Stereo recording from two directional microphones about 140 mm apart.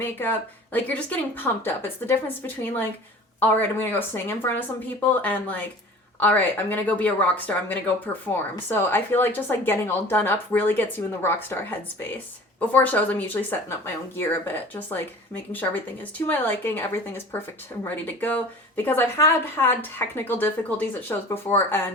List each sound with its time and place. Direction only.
0.0 s speech: 15° left (ahead or behind)